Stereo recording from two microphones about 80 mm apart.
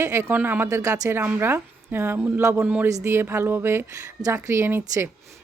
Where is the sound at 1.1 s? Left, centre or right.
Right.